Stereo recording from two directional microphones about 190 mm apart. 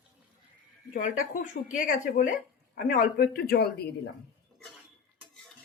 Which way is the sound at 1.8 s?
45° left (ahead or behind).